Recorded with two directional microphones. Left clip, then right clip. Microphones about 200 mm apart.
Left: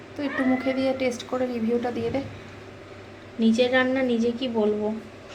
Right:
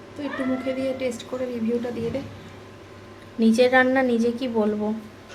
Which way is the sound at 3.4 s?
45° right (ahead or behind).